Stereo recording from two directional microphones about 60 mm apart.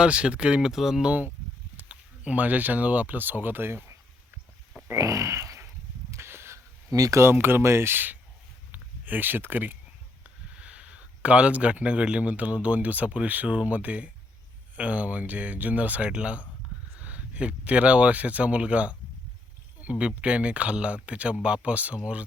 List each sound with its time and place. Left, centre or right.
0.0 s speech: centre
0.7 s speech: centre
1.7 s speech: right
4.9 s speech: right
6.1 s a sound: right
6.9 s speech: right
7.2 s speech: right
10.2 s speech: right